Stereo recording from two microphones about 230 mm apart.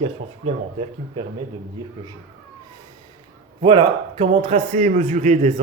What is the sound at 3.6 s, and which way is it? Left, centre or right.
Speech, right.